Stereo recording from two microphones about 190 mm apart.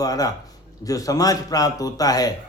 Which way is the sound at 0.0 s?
20° left (ahead or behind).